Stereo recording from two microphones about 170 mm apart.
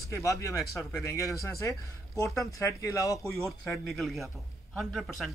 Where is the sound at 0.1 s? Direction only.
20° left (ahead or behind).